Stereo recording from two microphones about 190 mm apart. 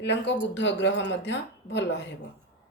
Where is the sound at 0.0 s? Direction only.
65° left (ahead or behind).